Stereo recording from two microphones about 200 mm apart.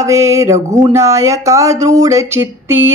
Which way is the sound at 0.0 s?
15° right (ahead or behind).